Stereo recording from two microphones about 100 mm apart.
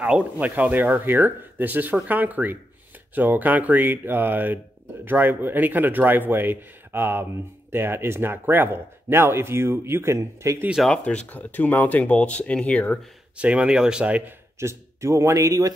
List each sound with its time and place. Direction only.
0.0 s speech: 15° right (ahead or behind); by 10.6 s 30° right (ahead or behind)
10.8 s speech: 10° left (ahead or behind)
13.4 s speech: 10° right (ahead or behind)
14.6 s speech: 30° right (ahead or behind)